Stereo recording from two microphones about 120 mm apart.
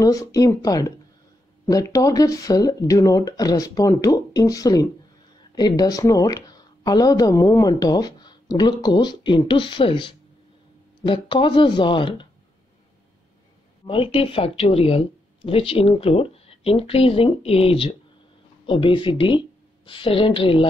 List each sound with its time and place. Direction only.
0.0 s speech: 30° left (ahead or behind)
13.8 s speech: 50° left (ahead or behind)